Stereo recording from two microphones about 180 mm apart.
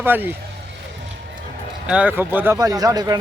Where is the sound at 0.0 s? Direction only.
10° right (ahead or behind).